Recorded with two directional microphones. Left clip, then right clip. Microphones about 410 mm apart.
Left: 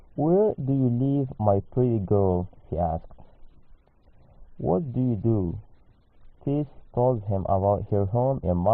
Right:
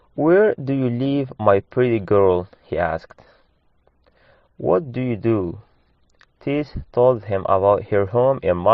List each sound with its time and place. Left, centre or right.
0.2 s speech: right
4.6 s speech: right